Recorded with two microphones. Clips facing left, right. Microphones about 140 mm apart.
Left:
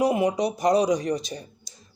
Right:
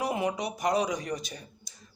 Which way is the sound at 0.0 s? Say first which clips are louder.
Left 8 dB; 20° left (ahead or behind).